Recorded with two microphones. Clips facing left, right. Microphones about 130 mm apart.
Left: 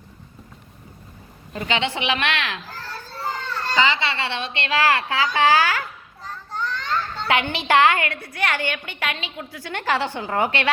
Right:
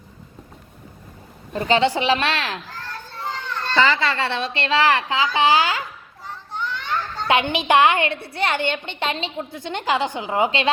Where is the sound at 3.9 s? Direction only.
40° right (ahead or behind).